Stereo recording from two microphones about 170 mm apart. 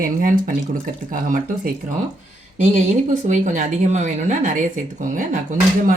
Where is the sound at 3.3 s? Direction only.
45° right (ahead or behind).